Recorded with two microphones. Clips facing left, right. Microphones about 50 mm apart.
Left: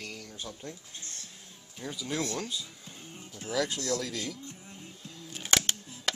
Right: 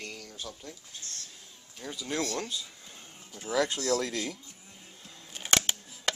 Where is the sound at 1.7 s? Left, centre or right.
Centre.